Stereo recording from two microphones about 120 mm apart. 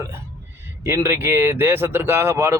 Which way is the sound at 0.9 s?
20° right (ahead or behind).